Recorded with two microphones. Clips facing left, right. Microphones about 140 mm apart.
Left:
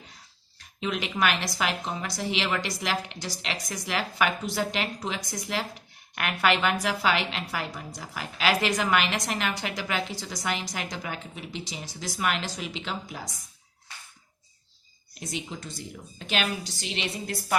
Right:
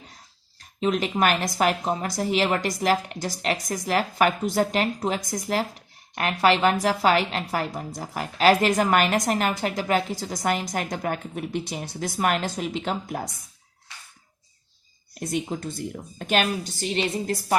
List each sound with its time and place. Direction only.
0.6 s a woman's voice: 40° right (ahead or behind)
15.2 s a woman's voice: 50° right (ahead or behind)